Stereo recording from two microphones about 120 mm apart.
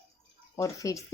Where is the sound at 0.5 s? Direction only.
30° left (ahead or behind).